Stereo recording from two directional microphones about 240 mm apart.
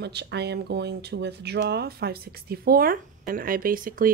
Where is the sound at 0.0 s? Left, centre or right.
Right.